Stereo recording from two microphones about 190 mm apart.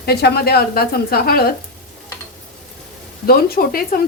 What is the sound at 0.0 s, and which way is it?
A woman's voice, 55° left (ahead or behind).